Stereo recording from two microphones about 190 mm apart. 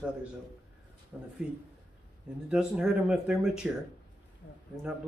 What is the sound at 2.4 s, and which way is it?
Speech, 5° right (ahead or behind).